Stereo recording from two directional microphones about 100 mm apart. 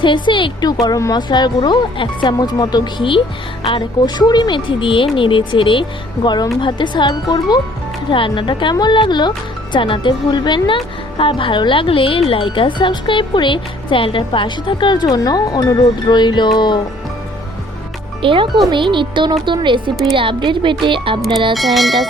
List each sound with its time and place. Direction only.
0.0 s speech: 55° left (ahead or behind)
6.2 s speech: 45° left (ahead or behind)
8.1 s speech: 55° left (ahead or behind)
11.2 s speech: 60° left (ahead or behind)
18.2 s speech: 60° right (ahead or behind)
21.5 s speech: centre (ahead or behind)